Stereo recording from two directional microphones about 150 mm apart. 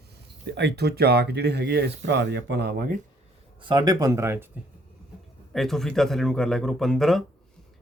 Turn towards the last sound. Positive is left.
turn(degrees=0)  # may be behind; listen again after turning